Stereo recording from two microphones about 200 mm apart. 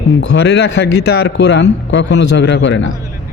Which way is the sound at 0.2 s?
60° left (ahead or behind).